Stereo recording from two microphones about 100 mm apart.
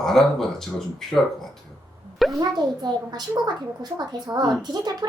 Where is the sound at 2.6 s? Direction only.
45° right (ahead or behind).